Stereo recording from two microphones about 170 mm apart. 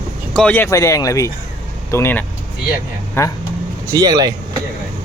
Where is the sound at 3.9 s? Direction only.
20° right (ahead or behind).